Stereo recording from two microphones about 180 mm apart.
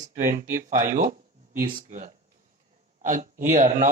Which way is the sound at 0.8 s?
50° right (ahead or behind).